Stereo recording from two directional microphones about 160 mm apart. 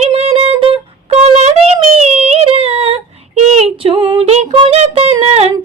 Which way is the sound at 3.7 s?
35° right (ahead or behind).